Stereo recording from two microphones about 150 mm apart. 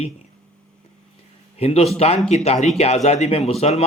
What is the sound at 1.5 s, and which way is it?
A man's voice, 40° left (ahead or behind).